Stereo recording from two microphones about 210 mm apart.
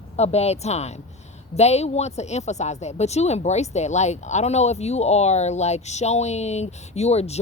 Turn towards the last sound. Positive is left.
turn(degrees=30)  # may be behind; listen again after turning